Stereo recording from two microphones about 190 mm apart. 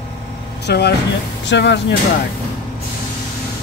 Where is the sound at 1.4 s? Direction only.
70° left (ahead or behind).